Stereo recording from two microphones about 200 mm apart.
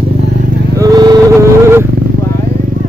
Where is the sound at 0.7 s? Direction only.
20° right (ahead or behind).